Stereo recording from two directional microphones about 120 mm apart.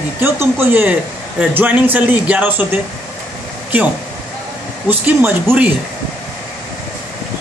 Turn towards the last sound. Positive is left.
turn(degrees=-15)  # may be behind; listen again after turning